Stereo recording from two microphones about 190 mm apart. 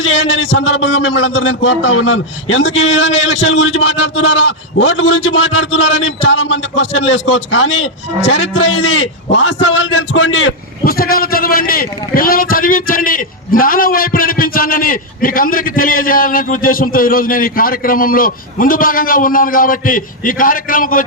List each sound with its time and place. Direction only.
0.0 s a man's voice: 80° left
10.8 s a man's voice: 50° left (ahead or behind)